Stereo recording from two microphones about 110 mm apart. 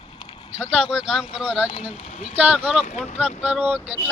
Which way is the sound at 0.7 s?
5° right (ahead or behind).